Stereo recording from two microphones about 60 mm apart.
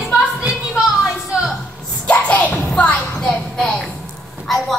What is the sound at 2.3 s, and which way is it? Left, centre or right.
Music, left.